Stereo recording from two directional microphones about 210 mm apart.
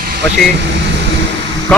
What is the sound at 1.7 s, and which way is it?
Speech, 5° left (ahead or behind).